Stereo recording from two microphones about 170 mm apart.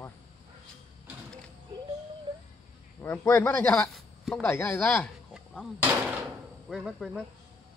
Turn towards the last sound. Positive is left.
turn(degrees=0)  # may be behind; listen again after turning